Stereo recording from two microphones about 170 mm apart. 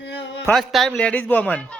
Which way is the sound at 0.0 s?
90° left.